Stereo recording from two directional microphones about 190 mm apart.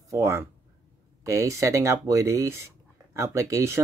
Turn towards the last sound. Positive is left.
turn(degrees=-15)  # may be behind; listen again after turning